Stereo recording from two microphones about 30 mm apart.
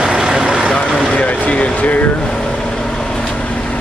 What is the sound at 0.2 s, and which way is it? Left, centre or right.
Vehicle, right.